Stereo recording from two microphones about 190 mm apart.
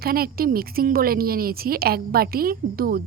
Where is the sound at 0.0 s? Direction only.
50° right (ahead or behind).